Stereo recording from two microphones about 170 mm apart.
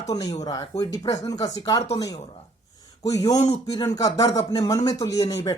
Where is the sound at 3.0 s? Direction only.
20° left (ahead or behind).